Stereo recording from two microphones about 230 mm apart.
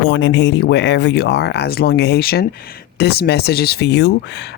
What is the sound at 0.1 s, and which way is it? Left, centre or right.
Speech, left.